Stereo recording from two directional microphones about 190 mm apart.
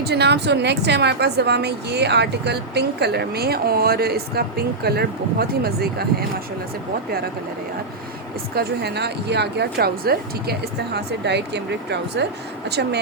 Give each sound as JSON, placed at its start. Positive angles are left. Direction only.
{"t": 0.0, "sound": "a woman's voice", "side_deg": -60}
{"t": 8.5, "sound": "a woman's voice", "side_deg": -60}